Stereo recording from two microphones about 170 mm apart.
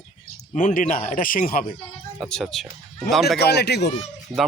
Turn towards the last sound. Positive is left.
turn(degrees=0)  # may be behind; listen again after turning